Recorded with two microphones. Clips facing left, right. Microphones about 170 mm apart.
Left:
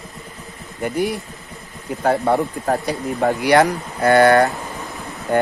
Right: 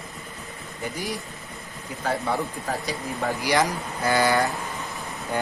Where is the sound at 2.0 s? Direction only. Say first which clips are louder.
Left 9 dB; 60° left (ahead or behind).